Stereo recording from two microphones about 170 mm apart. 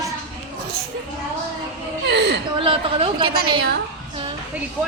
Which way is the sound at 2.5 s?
35° right (ahead or behind).